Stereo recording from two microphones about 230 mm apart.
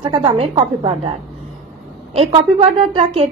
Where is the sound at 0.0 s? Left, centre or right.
Centre.